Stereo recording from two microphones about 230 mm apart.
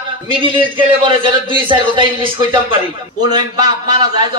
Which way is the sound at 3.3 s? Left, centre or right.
Centre.